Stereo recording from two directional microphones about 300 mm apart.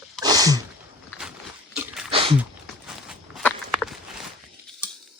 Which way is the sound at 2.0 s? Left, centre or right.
Centre.